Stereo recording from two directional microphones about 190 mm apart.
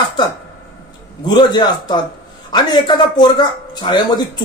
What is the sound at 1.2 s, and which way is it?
Speech, 20° left (ahead or behind).